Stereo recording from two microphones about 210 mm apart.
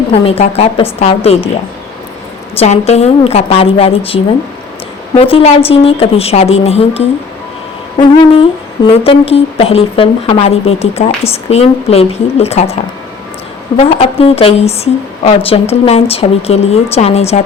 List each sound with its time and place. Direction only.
0.1 s speech: 30° left (ahead or behind)
2.6 s speech: 30° left (ahead or behind)
13.7 s speech: 30° left (ahead or behind)